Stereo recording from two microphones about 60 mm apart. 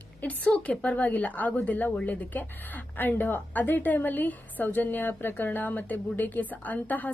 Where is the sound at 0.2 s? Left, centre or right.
Left.